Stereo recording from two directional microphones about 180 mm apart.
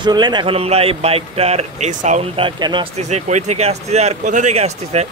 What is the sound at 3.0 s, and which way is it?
Speech, 40° right (ahead or behind).